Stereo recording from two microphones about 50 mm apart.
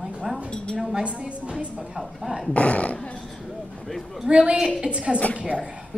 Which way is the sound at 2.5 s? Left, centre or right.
Left.